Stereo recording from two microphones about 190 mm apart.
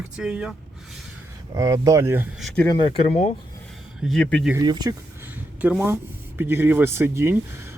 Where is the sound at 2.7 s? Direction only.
25° left (ahead or behind).